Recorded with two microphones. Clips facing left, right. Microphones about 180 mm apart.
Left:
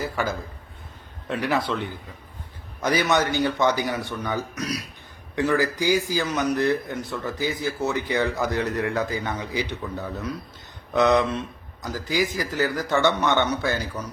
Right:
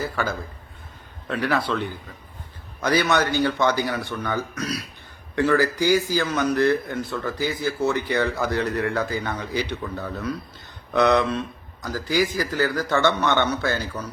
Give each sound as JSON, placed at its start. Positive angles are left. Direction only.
{"t": 0.0, "sound": "a man's voice", "side_deg": 15}
{"t": 2.8, "sound": "a man's voice", "side_deg": 15}
{"t": 10.9, "sound": "a man's voice", "side_deg": 15}